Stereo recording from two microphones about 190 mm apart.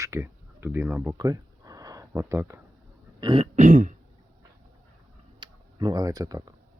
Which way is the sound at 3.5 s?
45° right (ahead or behind).